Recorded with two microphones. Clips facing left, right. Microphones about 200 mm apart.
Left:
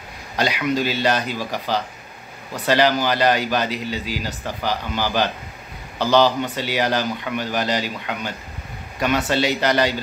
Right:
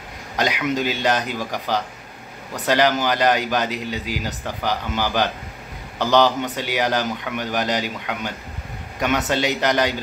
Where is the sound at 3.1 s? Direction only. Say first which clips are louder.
Even; 15° right (ahead or behind).